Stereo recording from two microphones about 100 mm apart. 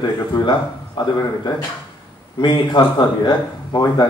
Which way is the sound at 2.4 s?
50° left (ahead or behind).